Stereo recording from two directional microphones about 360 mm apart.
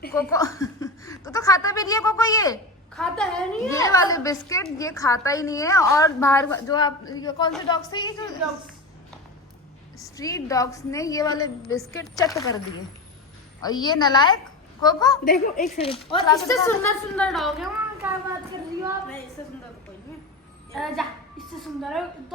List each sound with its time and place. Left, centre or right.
0.1 s speech: centre
10.0 s speech: centre
13.6 s speech: centre
15.2 s speech: left; by 18.1 s centre
20.7 s a woman's voice: centre